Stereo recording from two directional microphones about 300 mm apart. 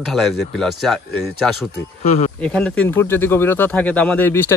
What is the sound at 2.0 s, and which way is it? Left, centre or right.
Speech, left.